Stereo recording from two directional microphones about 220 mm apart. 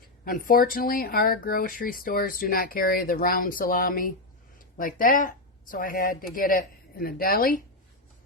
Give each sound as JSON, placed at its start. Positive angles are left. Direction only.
{"t": 0.3, "sound": "speech", "side_deg": 40}